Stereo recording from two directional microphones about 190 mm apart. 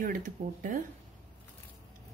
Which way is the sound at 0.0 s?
45° right (ahead or behind).